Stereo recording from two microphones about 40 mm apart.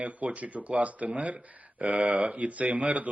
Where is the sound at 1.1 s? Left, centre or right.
Right.